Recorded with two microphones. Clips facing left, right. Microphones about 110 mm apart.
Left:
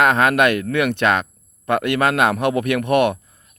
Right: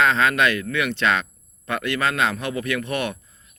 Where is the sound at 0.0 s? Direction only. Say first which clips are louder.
Left 4 dB; 55° left (ahead or behind).